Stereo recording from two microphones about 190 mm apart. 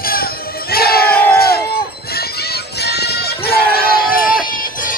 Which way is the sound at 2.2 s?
55° left (ahead or behind).